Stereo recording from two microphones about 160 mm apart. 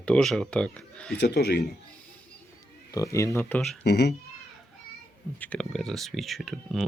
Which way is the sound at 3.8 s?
90° left.